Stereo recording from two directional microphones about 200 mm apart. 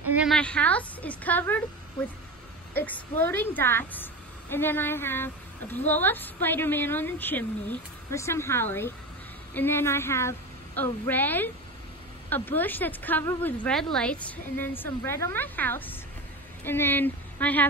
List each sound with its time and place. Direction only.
0.1 s a sound: 5° right (ahead or behind)
0.4 s a woman's voice: 5° left (ahead or behind)
2.7 s a woman's voice: 10° left (ahead or behind)